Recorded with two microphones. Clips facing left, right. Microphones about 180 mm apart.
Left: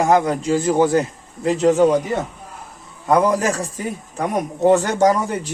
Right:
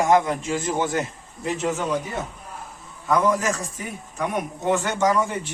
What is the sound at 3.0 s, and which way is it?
A man's voice, 35° left (ahead or behind).